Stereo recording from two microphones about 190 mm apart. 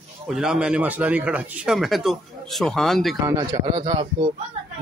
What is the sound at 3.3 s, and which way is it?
Speech, 25° right (ahead or behind).